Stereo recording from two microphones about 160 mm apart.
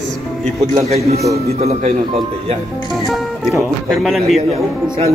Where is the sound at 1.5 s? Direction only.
40° right (ahead or behind).